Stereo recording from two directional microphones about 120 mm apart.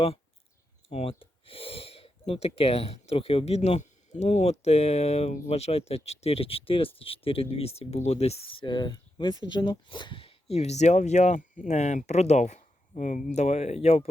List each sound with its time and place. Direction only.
0.9 s speech: 55° left (ahead or behind)
8.6 s speech: 40° left (ahead or behind); by 13.2 s 90° left
13.3 s speech: 65° left (ahead or behind)